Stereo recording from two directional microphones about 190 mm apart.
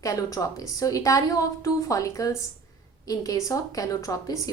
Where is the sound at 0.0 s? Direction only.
15° left (ahead or behind).